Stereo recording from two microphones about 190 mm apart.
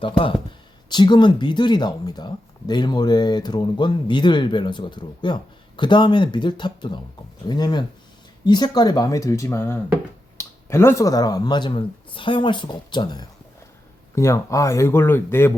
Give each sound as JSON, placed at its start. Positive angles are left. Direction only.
{"t": 0.9, "sound": "speech", "side_deg": 25}